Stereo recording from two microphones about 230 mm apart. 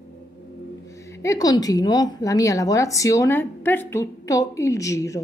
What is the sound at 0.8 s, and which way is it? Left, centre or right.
A woman's voice, centre.